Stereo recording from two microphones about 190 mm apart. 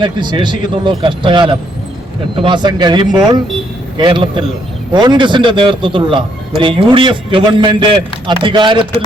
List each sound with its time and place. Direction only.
0.0 s a man's voice: 25° right (ahead or behind)